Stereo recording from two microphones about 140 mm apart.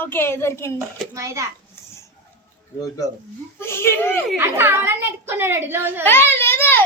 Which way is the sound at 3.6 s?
15° left (ahead or behind).